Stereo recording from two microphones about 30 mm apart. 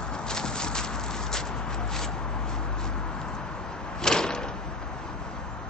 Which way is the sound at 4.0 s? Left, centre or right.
Left.